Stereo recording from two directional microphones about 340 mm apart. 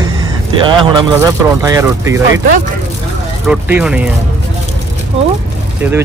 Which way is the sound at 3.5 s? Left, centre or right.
Centre.